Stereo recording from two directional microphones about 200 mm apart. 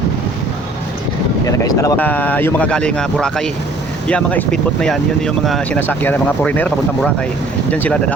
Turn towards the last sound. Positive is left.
turn(degrees=5)  # may be behind; listen again after turning